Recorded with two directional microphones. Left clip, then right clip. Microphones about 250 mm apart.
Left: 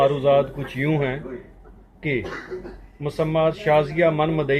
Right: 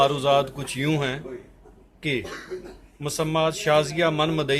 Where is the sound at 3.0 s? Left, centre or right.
Right.